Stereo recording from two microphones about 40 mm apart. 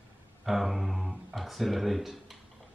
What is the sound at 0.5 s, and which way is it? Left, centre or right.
Speech, centre.